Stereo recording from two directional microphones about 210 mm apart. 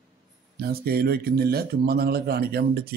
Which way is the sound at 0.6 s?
45° right (ahead or behind).